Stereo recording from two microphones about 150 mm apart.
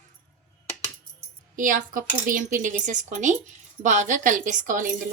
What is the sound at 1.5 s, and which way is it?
Speech, 60° right (ahead or behind).